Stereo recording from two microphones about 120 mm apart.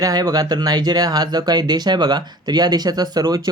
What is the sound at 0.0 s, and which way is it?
Speech, 30° right (ahead or behind).